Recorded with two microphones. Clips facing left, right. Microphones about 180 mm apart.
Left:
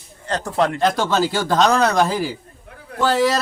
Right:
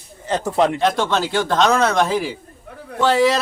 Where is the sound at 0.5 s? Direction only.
15° right (ahead or behind).